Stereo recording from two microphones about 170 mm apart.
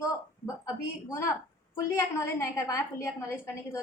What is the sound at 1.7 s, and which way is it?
A woman's voice, 15° left (ahead or behind).